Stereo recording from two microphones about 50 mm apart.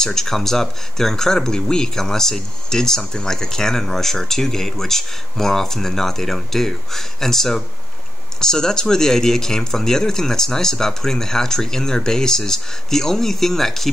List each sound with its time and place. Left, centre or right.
0.0 s speech: centre